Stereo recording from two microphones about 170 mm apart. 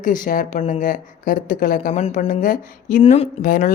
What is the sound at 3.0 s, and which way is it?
Speech, 35° left (ahead or behind).